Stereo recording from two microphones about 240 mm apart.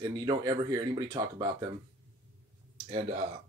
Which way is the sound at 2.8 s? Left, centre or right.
Right.